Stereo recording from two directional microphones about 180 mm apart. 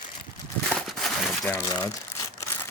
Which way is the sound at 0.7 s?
Centre (ahead or behind).